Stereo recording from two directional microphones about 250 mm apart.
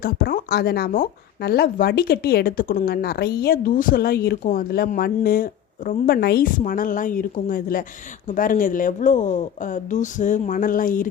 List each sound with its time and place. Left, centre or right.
0.0 s speech: left